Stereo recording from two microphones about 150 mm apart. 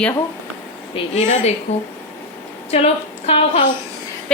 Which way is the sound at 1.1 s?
55° left (ahead or behind).